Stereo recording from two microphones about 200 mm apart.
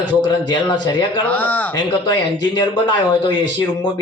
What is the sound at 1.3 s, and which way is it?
Speech, 10° left (ahead or behind).